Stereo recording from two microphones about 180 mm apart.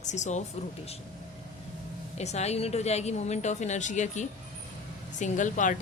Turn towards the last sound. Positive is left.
turn(degrees=45)  # may be behind; listen again after turning